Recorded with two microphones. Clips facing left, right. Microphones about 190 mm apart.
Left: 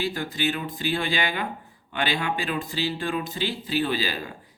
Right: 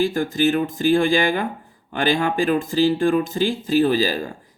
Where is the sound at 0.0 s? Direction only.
45° right (ahead or behind).